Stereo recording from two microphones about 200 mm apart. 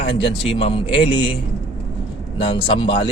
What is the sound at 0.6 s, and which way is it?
Speech, 25° left (ahead or behind).